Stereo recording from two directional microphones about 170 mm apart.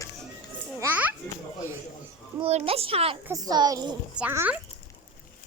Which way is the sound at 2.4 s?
35° right (ahead or behind).